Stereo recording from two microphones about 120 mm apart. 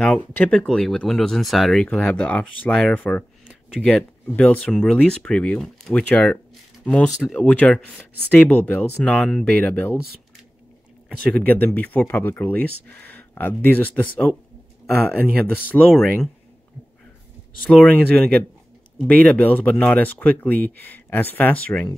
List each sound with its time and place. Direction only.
0.0 s speech: 10° left (ahead or behind)
4.4 s speech: 10° left (ahead or behind)
11.1 s speech: 10° left (ahead or behind)
15.0 s speech: 15° left (ahead or behind)
16.0 s speech: 5° left (ahead or behind)
17.6 s speech: 10° left (ahead or behind)